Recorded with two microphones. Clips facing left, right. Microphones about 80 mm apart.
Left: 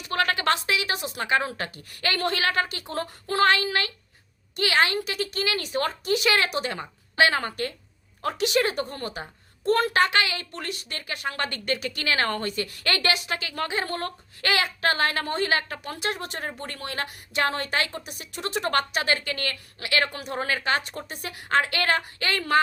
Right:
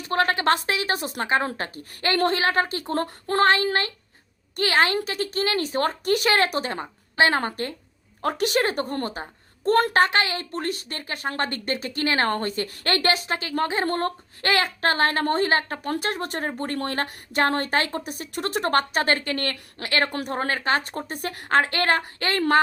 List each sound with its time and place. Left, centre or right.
0.1 s a sound: right
0.5 s a woman's voice: right
20.1 s speech: right
20.3 s a woman's voice: right